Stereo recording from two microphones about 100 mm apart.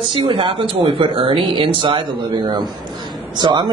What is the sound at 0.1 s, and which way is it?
A man's voice, 55° right (ahead or behind).